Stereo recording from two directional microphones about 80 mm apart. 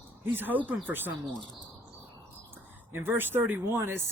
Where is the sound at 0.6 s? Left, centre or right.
Right.